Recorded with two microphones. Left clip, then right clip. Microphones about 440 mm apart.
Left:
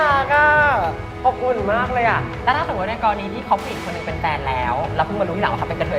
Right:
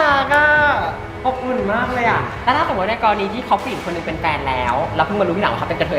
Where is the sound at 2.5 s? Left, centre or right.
Left.